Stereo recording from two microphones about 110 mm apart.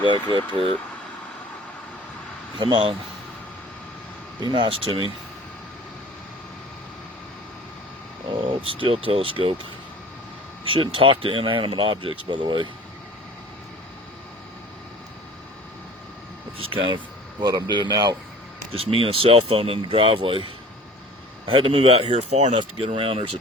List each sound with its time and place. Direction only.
0.0 s speech: 50° right (ahead or behind)
2.6 s speech: 50° right (ahead or behind)
4.4 s speech: 50° right (ahead or behind)
8.3 s speech: 55° right (ahead or behind)
10.6 s speech: 55° right (ahead or behind)
16.7 s speech: 50° right (ahead or behind)
17.7 s speech: 40° right (ahead or behind)
18.7 s speech: 55° right (ahead or behind)
21.4 s speech: 55° right (ahead or behind); by 22.5 s 80° right
23.0 s speech: 55° right (ahead or behind)